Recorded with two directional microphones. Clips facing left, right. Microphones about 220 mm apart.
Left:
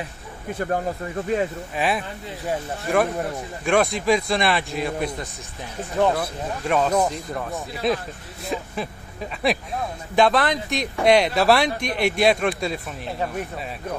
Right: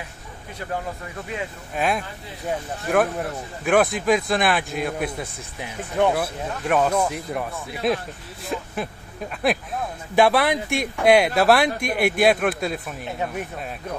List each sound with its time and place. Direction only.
0.6 s speech: 45° left (ahead or behind)
1.8 s speech: centre (ahead or behind)